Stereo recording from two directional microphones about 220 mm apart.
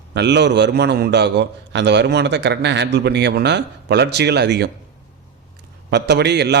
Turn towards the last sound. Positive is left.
turn(degrees=-50)  # may be behind; listen again after turning